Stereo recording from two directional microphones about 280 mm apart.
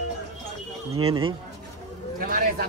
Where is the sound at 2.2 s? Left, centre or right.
Right.